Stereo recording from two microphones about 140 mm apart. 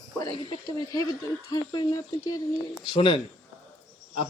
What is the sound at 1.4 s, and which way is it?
Speech, 30° left (ahead or behind).